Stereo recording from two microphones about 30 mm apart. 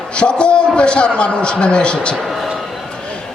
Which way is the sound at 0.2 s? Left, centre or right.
Left.